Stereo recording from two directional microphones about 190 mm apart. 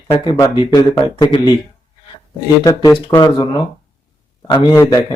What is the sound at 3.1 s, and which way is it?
Speech, 20° left (ahead or behind).